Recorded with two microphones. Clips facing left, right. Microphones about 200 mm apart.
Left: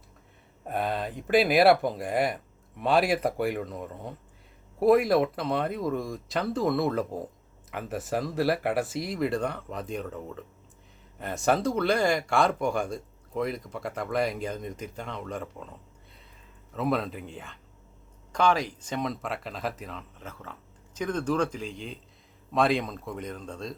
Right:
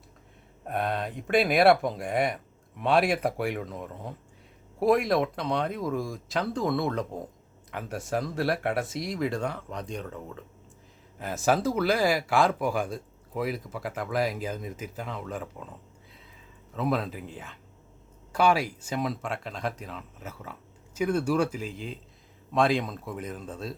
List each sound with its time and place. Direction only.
0.6 s speech: centre (ahead or behind)
16.7 s speech: centre (ahead or behind)